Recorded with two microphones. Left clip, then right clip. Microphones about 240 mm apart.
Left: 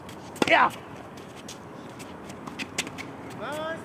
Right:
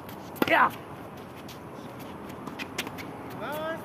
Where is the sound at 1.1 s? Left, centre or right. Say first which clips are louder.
Left 1 dB; left.